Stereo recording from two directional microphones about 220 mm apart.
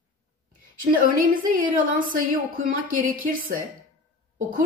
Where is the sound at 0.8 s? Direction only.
40° right (ahead or behind).